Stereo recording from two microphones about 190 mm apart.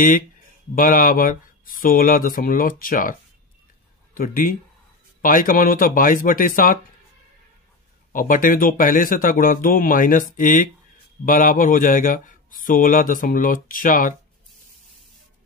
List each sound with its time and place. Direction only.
0.7 s speech: 45° left (ahead or behind)
8.1 s speech: 45° left (ahead or behind)